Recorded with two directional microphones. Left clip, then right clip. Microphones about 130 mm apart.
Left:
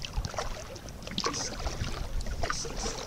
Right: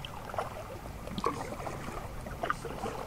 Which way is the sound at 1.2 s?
15° right (ahead or behind).